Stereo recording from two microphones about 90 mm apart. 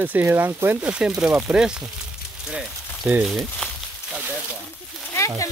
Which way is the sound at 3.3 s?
Centre (ahead or behind).